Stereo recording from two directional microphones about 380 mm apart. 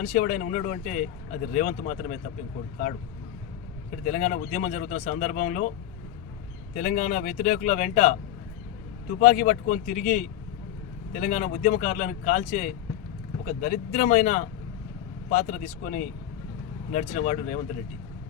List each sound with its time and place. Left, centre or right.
0.0 s speech: left
4.0 s speech: centre
6.7 s speech: centre